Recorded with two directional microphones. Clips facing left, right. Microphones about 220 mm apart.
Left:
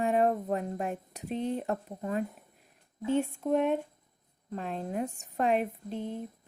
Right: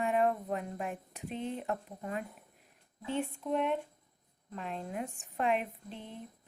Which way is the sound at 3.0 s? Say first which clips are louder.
Left 7 dB; 45° left (ahead or behind).